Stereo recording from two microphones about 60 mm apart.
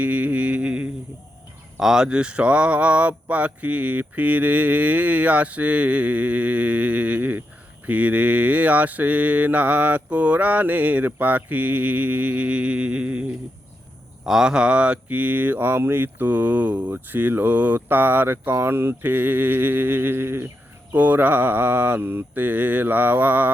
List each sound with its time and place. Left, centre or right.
0.0 s a sound: right
1.8 s speech: centre
2.0 s mantra: centre
14.3 s mantra: centre; by 18.5 s right
18.5 s speech: right
20.9 s mantra: right